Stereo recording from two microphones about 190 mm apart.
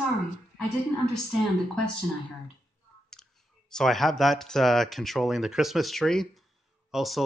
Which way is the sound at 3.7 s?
Centre (ahead or behind).